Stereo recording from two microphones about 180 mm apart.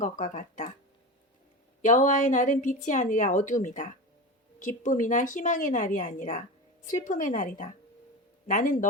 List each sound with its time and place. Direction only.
0.0 s a woman's voice: 45° left (ahead or behind)
1.8 s a woman's voice: 45° left (ahead or behind)